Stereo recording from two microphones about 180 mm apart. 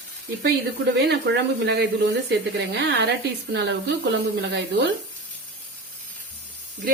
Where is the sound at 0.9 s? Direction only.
75° right (ahead or behind).